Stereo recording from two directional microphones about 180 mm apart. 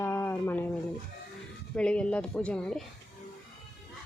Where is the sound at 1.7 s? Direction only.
5° left (ahead or behind).